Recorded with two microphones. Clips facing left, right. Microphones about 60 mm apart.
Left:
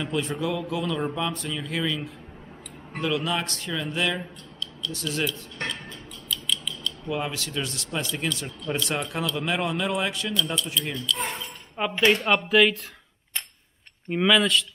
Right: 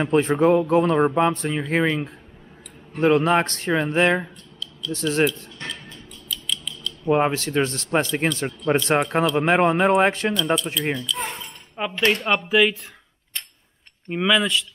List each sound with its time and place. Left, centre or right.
0.0 s speech: right
6.3 s scissors: centre
7.1 s speech: right
11.1 s chink: centre
12.1 s speech: centre
14.0 s speech: centre